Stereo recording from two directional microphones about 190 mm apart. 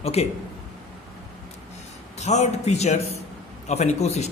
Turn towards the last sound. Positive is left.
turn(degrees=35)  # may be behind; listen again after turning